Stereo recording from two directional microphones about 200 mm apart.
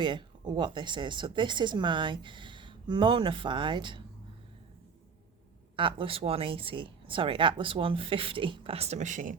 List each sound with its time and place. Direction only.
0.0 s speech: 25° right (ahead or behind)
5.7 s speech: 25° right (ahead or behind)